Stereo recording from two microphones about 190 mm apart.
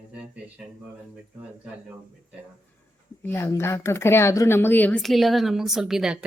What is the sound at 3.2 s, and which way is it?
A woman's voice, 15° left (ahead or behind).